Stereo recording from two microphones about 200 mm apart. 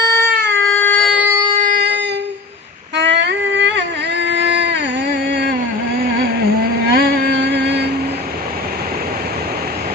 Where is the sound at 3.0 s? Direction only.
60° right (ahead or behind).